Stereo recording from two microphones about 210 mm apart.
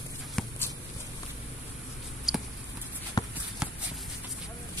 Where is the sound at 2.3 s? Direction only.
Centre (ahead or behind).